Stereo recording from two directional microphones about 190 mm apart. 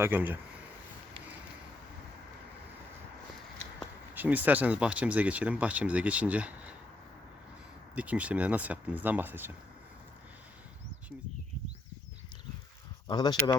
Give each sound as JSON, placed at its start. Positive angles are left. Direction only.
{"t": 0.0, "sound": "speech", "side_deg": -10}
{"t": 4.1, "sound": "speech", "side_deg": -10}
{"t": 7.9, "sound": "speech", "side_deg": -5}
{"t": 13.1, "sound": "speech", "side_deg": 20}